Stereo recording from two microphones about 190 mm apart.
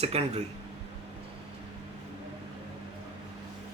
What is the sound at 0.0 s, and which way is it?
Speech, 35° right (ahead or behind).